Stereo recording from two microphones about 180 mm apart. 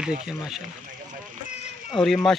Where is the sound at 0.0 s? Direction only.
5° right (ahead or behind).